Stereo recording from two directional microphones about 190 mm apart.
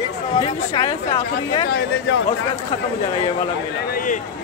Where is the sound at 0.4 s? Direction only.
20° left (ahead or behind).